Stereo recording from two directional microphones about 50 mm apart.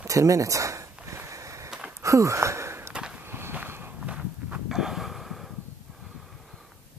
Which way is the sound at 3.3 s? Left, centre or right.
Right.